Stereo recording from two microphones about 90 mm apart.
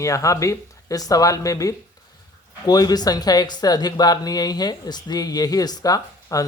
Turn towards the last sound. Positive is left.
turn(degrees=40)  # may be behind; listen again after turning